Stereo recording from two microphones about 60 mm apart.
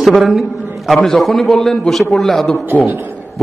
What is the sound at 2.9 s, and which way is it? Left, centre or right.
Speech, right.